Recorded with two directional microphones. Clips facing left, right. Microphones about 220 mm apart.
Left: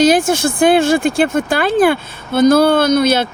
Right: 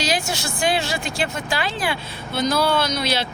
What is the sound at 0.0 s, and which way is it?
Speech, 50° left (ahead or behind).